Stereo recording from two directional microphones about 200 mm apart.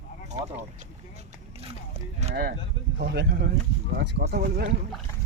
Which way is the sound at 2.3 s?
50° right (ahead or behind).